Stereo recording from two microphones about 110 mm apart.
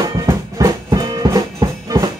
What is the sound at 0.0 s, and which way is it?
Music, 35° right (ahead or behind).